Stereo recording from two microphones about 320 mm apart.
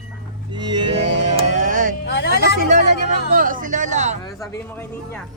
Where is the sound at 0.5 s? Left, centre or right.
Centre.